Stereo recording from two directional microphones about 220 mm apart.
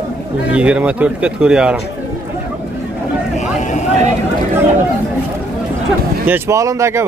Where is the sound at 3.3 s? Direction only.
35° left (ahead or behind).